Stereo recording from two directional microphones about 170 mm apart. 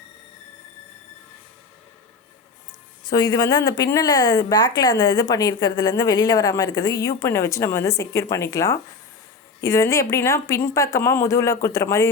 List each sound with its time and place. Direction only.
3.0 s a woman's voice: 25° left (ahead or behind)